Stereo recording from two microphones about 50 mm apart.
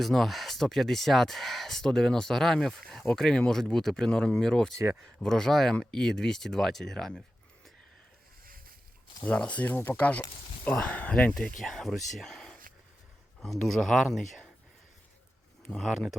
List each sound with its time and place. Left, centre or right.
0.0 s speech: centre
9.2 s speech: left
11.3 s speech: centre
15.8 s speech: centre